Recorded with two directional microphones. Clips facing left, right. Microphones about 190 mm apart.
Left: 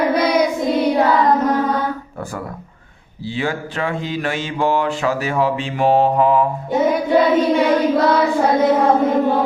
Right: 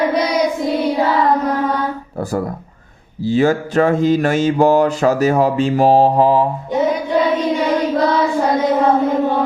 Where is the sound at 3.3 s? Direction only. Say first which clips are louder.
Right 8 dB; 45° right (ahead or behind).